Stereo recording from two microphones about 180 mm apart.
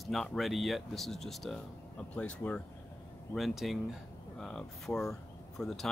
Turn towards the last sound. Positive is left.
turn(degrees=0)  # may be behind; listen again after turning